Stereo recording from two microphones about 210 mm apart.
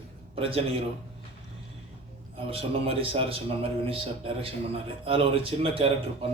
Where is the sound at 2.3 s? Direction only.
25° right (ahead or behind).